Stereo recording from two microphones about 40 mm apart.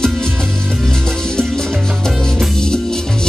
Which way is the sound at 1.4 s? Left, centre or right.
Centre.